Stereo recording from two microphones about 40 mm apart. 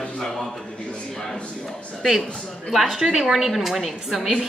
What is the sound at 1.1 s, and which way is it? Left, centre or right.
A man's voice, centre.